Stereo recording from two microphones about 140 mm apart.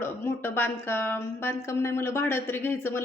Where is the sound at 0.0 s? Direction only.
15° left (ahead or behind).